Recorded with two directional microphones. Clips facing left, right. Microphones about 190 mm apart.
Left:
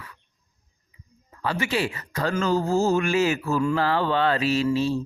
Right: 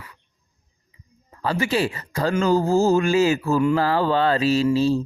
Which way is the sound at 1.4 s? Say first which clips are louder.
Right 3 dB; 35° right (ahead or behind).